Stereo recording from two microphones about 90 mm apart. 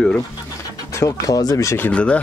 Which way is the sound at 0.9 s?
35° left (ahead or behind).